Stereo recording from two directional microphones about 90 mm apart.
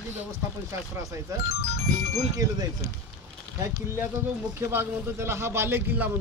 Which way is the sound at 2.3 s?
40° right (ahead or behind).